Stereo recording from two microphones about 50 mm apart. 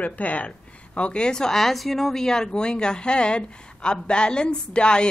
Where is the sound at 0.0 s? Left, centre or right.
Left.